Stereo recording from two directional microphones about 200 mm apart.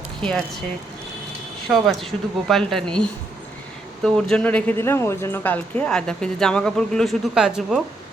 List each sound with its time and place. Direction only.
0.2 s speech: 5° left (ahead or behind)
1.6 s speech: centre (ahead or behind)